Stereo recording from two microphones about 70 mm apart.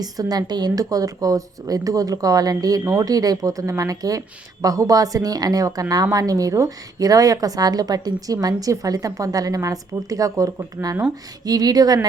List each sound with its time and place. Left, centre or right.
0.0 s a woman's voice: right
11.4 s a woman's voice: right